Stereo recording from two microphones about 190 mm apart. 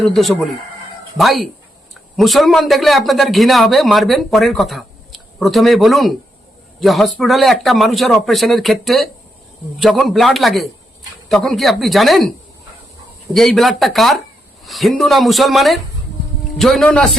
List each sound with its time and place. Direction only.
0.0 s a man's voice: centre (ahead or behind)
13.3 s a man's voice: centre (ahead or behind)